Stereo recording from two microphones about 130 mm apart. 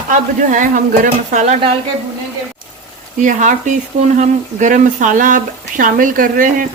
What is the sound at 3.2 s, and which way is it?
Speech, 75° right (ahead or behind).